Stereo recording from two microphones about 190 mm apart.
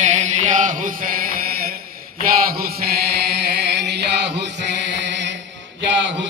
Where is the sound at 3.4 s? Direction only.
60° right (ahead or behind).